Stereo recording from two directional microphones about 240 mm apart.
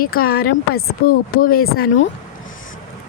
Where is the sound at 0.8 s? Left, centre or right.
Left.